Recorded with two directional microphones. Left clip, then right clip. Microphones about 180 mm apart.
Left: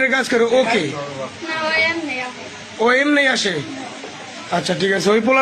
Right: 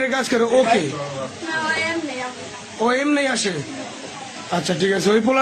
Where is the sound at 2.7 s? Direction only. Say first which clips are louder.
Left 4 dB; 10° right (ahead or behind).